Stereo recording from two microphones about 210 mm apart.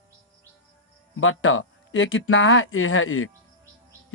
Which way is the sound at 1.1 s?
70° left (ahead or behind).